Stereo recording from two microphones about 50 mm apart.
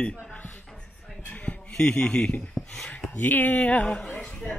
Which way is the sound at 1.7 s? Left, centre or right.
Centre.